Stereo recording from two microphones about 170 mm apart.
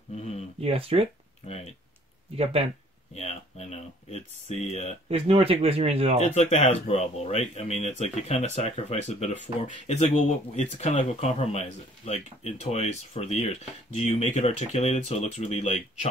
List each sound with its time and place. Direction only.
0.1 s a sound: 40° left (ahead or behind)
0.6 s speech: 35° right (ahead or behind)
1.4 s speech: 45° left (ahead or behind)
3.2 s speech: 40° left (ahead or behind)
5.1 s speech: 35° right (ahead or behind)
6.2 s speech: 40° left (ahead or behind)